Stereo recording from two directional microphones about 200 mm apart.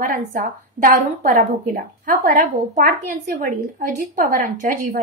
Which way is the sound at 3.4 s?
40° right (ahead or behind).